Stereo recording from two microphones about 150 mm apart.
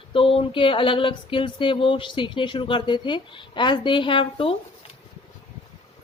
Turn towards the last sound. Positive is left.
turn(degrees=35)  # may be behind; listen again after turning